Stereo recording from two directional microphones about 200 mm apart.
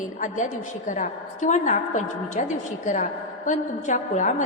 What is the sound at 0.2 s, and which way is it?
A woman's voice, 40° left (ahead or behind).